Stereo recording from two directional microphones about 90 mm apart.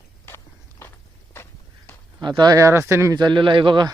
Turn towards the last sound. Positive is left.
turn(degrees=-60)  # may be behind; listen again after turning